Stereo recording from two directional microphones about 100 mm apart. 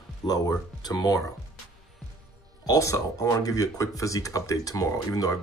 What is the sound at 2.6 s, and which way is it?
Speech, 35° left (ahead or behind).